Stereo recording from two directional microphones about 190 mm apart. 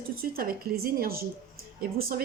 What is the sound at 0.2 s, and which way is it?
A woman's voice, 50° right (ahead or behind).